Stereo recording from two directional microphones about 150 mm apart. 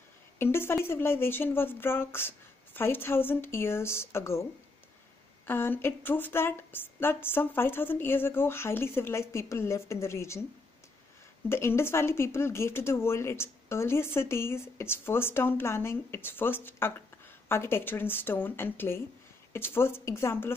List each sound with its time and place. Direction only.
0.4 s speech: 15° left (ahead or behind)
5.5 s speech: 15° left (ahead or behind)
11.4 s speech: 15° left (ahead or behind)